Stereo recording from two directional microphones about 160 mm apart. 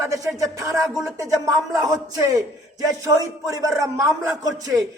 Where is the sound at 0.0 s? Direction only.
20° right (ahead or behind).